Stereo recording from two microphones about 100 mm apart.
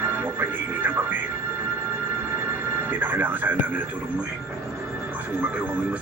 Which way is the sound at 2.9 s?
20° right (ahead or behind).